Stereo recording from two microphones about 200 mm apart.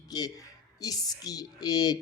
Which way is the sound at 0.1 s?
20° left (ahead or behind).